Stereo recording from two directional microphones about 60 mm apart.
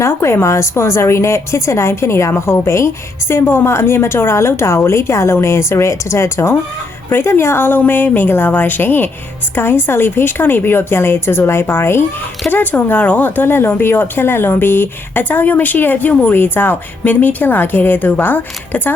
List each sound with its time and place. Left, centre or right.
0.0 s a woman's voice: left